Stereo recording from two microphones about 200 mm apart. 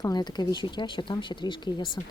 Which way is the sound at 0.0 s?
20° left (ahead or behind).